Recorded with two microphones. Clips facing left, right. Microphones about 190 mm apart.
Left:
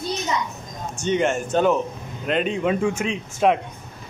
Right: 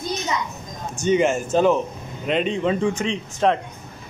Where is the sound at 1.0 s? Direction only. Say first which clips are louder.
Right 3 dB; 5° right (ahead or behind).